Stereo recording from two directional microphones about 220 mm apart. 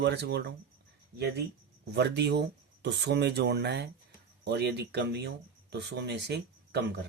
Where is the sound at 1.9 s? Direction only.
50° right (ahead or behind).